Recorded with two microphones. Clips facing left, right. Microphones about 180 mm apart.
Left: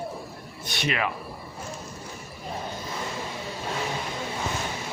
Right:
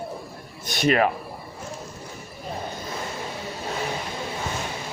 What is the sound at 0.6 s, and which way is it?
Speech, 45° right (ahead or behind).